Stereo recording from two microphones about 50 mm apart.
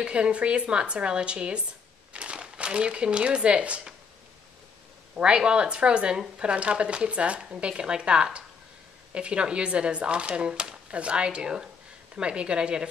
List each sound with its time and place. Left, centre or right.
0.0 s a woman's voice: right
5.1 s a woman's voice: centre